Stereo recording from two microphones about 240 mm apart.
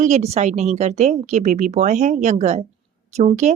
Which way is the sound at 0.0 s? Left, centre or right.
Right.